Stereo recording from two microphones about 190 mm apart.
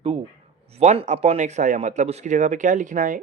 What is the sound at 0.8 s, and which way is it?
Speech, 35° right (ahead or behind).